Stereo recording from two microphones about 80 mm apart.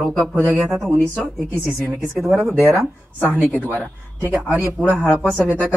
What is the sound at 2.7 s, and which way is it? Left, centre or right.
Speech, left.